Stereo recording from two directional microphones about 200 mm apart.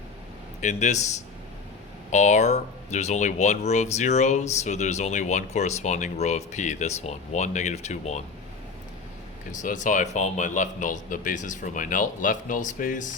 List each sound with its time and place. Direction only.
0.6 s speech: 35° left (ahead or behind)
2.1 s speech: 35° left (ahead or behind)
9.5 s speech: 40° left (ahead or behind)